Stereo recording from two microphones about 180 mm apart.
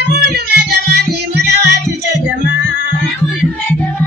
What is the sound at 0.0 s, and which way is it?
Music, 65° right (ahead or behind).